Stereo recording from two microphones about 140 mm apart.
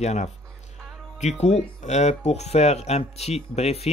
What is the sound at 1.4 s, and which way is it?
Speech, 55° left (ahead or behind).